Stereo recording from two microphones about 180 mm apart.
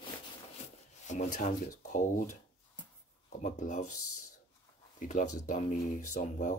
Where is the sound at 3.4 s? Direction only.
45° left (ahead or behind).